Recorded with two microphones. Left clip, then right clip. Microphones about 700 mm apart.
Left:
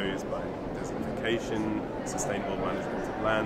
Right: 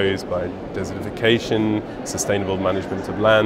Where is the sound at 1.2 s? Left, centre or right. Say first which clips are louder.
Right 13 dB; right.